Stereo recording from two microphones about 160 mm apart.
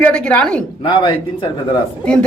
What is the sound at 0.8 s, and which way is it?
Speech, 30° left (ahead or behind).